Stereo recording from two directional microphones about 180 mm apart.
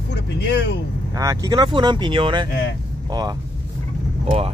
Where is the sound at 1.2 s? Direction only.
20° right (ahead or behind).